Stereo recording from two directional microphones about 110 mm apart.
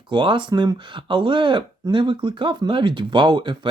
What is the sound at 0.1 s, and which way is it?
Speech, 45° right (ahead or behind).